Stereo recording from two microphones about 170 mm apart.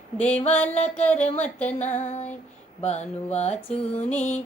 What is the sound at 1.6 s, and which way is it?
Female singing, 45° left (ahead or behind).